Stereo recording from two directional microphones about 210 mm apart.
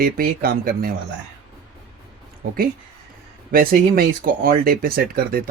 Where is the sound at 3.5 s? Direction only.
45° right (ahead or behind).